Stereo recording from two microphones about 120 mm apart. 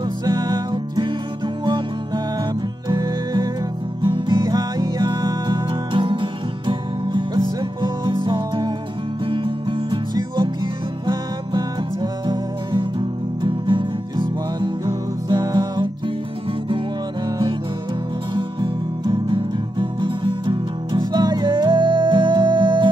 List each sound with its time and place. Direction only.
0.2 s music: 35° right (ahead or behind)
18.3 s music: 40° right (ahead or behind)